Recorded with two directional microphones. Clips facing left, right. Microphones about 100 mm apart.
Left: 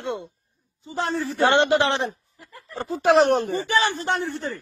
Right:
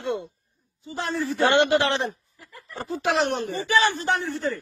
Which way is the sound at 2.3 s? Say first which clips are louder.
Left 3 dB; 30° left (ahead or behind).